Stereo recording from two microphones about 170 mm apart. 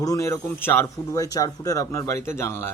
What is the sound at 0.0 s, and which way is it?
Speech, 20° left (ahead or behind).